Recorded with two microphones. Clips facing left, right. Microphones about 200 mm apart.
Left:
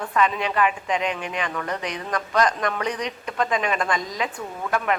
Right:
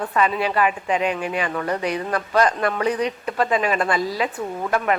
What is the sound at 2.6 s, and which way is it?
Speech, 35° right (ahead or behind).